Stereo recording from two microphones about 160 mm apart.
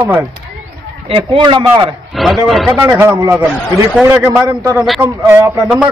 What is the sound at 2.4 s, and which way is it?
Speech, centre (ahead or behind).